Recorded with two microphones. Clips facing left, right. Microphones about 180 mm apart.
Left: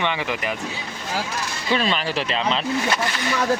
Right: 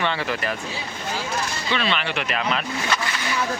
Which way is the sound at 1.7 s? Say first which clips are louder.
Left 3 dB; 40° left (ahead or behind).